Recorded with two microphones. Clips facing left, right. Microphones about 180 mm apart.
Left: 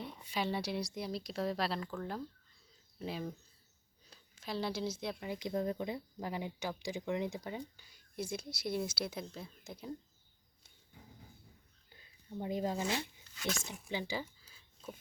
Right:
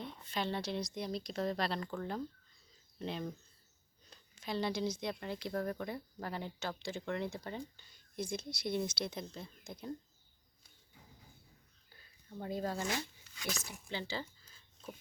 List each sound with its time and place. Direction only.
0.0 s speech: 10° left (ahead or behind)
12.4 s speech: 15° left (ahead or behind)
13.7 s a sound: 10° left (ahead or behind)